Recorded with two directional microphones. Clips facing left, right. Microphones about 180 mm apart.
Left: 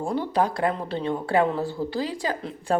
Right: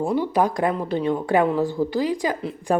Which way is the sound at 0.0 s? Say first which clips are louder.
Right 3 dB; 10° right (ahead or behind).